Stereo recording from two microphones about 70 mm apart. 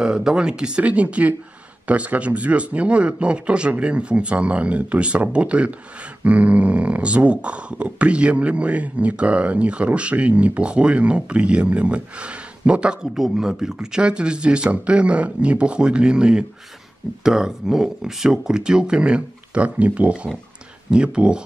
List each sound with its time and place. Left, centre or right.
0.0 s speech: centre